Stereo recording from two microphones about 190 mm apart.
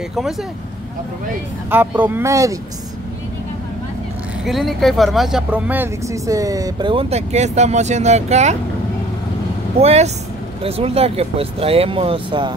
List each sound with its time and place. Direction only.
1.7 s speech: 10° right (ahead or behind)
4.5 s speech: centre (ahead or behind); by 8.5 s 35° right (ahead or behind)
9.8 s speech: 35° right (ahead or behind)